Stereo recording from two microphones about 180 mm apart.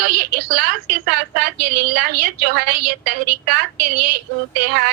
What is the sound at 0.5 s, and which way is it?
A woman's voice, 60° right (ahead or behind).